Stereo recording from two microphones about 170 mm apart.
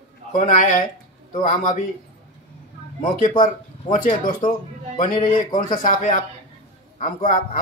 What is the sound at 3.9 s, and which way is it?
Speech, 50° left (ahead or behind).